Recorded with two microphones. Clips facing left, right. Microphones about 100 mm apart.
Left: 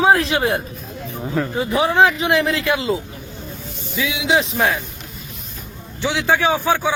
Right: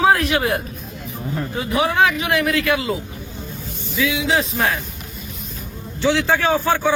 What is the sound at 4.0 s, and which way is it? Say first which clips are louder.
Speech: left 1 dB; 20° left (ahead or behind).